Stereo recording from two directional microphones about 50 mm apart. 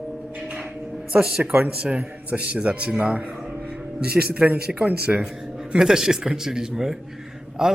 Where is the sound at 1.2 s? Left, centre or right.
Centre.